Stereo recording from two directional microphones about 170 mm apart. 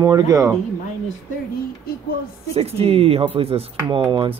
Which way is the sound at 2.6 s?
35° right (ahead or behind).